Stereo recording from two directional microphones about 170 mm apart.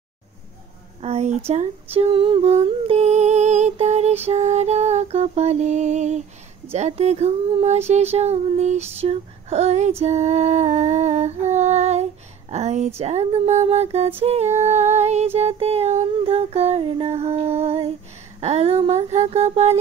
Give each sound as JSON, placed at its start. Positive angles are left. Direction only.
{"t": 1.0, "sound": "speech", "side_deg": -40}
{"t": 1.5, "sound": "humming", "side_deg": -35}
{"t": 4.3, "sound": "music", "side_deg": -40}
{"t": 6.7, "sound": "child singing", "side_deg": -40}